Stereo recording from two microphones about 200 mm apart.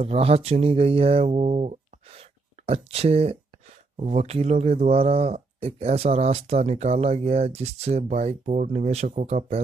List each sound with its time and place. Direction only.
0.0 s music: 30° right (ahead or behind)
3.9 s speech: 35° right (ahead or behind)